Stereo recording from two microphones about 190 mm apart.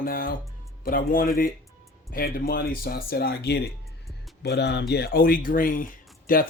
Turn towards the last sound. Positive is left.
turn(degrees=45)  # may be behind; listen again after turning